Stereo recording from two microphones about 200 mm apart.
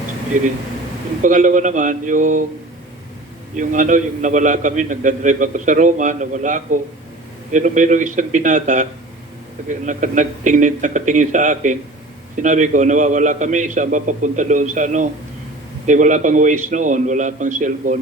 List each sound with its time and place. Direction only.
0.3 s a man's voice: 40° right (ahead or behind)
3.5 s a man's voice: 40° right (ahead or behind)